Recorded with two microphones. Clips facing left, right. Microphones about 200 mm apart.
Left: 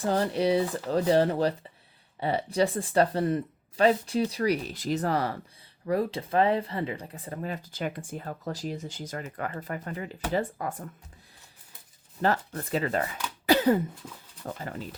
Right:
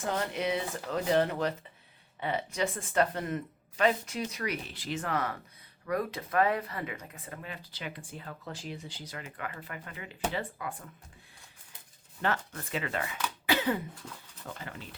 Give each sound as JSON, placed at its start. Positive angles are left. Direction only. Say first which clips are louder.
{"t": 0.0, "sound": "speech", "louder": "left 6 dB", "side_deg": 35}
{"t": 12.2, "sound": "speech", "louder": "left 5 dB", "side_deg": 40}
{"t": 13.4, "sound": "a sound", "louder": "left 8 dB", "side_deg": 40}
{"t": 14.4, "sound": "speech", "louder": "left 7 dB", "side_deg": 40}